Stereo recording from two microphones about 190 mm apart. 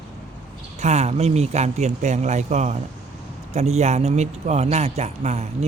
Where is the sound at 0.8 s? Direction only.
35° right (ahead or behind).